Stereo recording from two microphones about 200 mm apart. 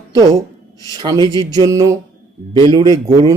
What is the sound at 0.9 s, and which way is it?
Mantra, 20° right (ahead or behind).